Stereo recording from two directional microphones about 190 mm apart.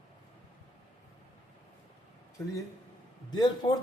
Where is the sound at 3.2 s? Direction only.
20° left (ahead or behind).